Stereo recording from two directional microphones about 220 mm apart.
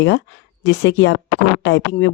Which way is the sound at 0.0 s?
55° left (ahead or behind).